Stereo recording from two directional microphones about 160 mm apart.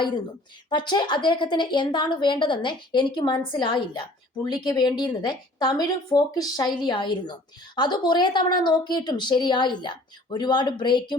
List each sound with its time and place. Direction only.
0.7 s speech: 30° left (ahead or behind)